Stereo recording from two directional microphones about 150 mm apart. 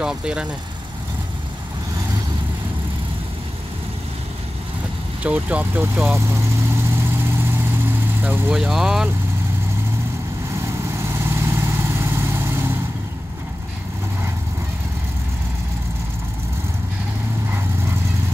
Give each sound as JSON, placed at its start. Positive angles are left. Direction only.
{"t": 0.0, "sound": "speech", "side_deg": -5}
{"t": 5.2, "sound": "speech", "side_deg": -10}
{"t": 6.2, "sound": "vehicle", "side_deg": -15}
{"t": 8.2, "sound": "speech", "side_deg": -10}
{"t": 11.0, "sound": "vehicle", "side_deg": -15}